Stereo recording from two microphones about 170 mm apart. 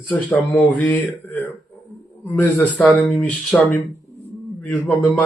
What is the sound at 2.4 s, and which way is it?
Speech, 10° left (ahead or behind).